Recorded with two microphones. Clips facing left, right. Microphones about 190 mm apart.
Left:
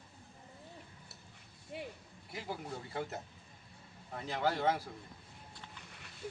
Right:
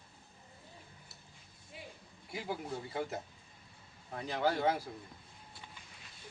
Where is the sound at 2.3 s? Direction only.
Centre (ahead or behind).